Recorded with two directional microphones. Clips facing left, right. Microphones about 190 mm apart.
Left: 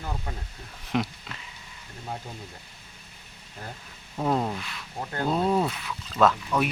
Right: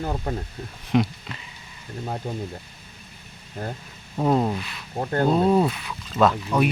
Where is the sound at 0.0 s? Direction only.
45° right (ahead or behind).